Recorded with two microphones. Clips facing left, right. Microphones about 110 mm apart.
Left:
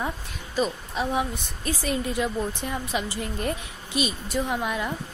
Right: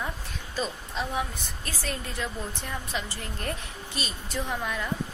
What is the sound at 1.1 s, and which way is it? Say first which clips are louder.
A woman's voice: left 4 dB; 15° left (ahead or behind).